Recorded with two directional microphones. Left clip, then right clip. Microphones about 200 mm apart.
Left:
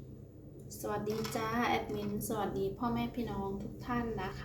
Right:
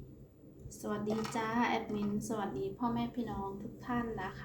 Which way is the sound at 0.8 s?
10° right (ahead or behind).